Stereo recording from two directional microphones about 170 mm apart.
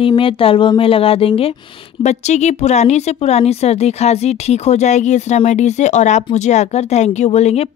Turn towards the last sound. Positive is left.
turn(degrees=40)  # may be behind; listen again after turning